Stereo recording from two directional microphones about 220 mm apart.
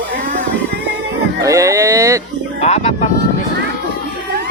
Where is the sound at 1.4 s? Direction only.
15° right (ahead or behind).